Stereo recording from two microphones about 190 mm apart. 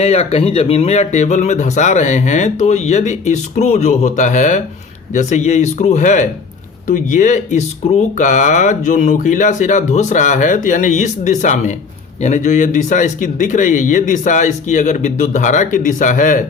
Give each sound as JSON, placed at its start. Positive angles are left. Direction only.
{"t": 0.0, "sound": "speech", "side_deg": 30}